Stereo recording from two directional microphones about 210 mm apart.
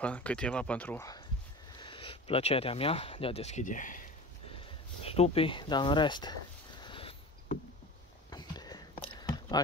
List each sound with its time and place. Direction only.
0.0 s speech: 5° left (ahead or behind)
1.8 s speech: 25° left (ahead or behind)
5.0 s speech: 30° left (ahead or behind)
8.3 s a sound: 20° left (ahead or behind)